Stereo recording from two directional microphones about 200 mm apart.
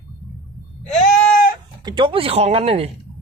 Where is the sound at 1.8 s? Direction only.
25° right (ahead or behind).